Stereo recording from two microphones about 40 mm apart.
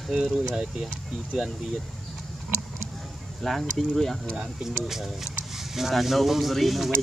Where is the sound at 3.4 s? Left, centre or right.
Centre.